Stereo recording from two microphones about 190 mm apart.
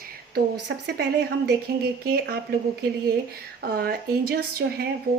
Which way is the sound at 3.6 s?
55° right (ahead or behind).